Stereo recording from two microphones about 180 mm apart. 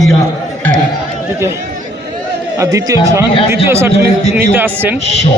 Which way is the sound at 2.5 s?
20° right (ahead or behind).